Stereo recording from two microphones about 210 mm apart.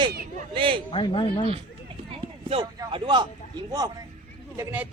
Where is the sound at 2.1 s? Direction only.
25° right (ahead or behind).